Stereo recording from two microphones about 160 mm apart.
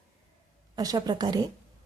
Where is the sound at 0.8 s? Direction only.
25° right (ahead or behind).